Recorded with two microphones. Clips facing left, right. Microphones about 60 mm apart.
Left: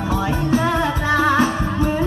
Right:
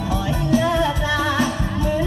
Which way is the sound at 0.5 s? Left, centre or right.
Left.